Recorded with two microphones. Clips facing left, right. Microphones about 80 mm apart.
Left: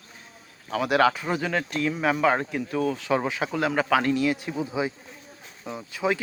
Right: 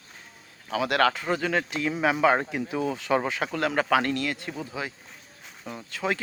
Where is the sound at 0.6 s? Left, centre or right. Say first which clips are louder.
Left 2 dB; centre.